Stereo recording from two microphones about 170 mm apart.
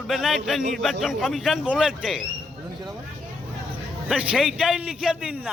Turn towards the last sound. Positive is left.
turn(degrees=-5)  # may be behind; listen again after turning